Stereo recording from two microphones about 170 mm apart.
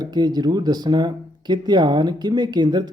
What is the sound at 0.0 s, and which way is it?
Speech, 25° right (ahead or behind).